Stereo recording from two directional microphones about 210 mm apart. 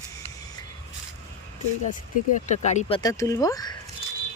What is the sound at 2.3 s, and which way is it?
Speech, 35° left (ahead or behind).